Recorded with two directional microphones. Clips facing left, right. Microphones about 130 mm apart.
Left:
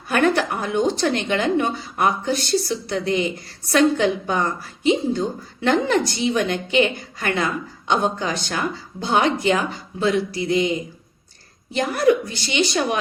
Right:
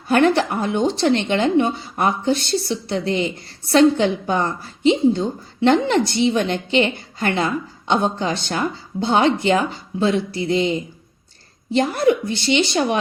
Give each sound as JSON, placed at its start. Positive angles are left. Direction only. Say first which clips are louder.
{"t": 0.1, "sound": "a woman's voice", "louder": "right 3 dB", "side_deg": -30}